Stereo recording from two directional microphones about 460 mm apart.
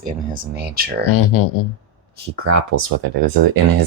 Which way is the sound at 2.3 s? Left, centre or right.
Right.